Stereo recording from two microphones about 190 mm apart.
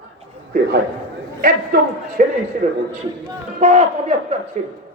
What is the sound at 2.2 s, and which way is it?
A man's voice, 45° right (ahead or behind).